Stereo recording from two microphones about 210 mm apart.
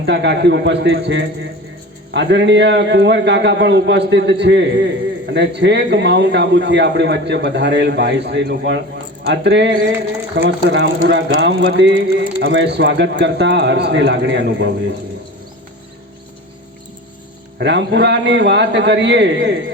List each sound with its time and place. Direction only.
0.0 s a man's voice: 55° right (ahead or behind)
17.6 s a man's voice: 55° right (ahead or behind)